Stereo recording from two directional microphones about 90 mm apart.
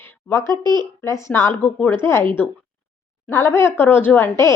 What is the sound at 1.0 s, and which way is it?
Speech, 35° left (ahead or behind).